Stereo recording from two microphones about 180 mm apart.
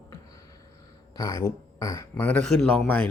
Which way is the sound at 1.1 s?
20° left (ahead or behind).